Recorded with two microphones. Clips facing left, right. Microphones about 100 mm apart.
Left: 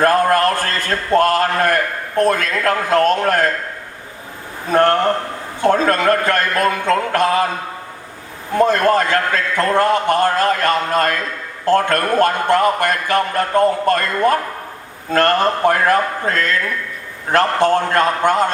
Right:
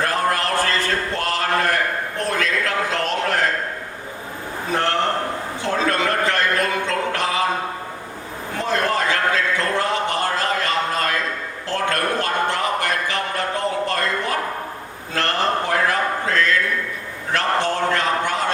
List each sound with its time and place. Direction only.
0.0 s a man's voice: 45° left (ahead or behind)
4.7 s a man's voice: 50° left (ahead or behind)
8.5 s a man's voice: 50° left (ahead or behind)